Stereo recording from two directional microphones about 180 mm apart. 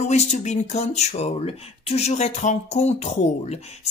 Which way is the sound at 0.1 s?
40° left (ahead or behind).